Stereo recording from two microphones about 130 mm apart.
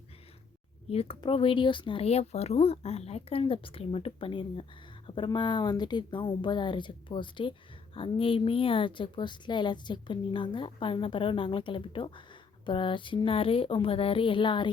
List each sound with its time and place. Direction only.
0.9 s a woman's voice: 50° left (ahead or behind)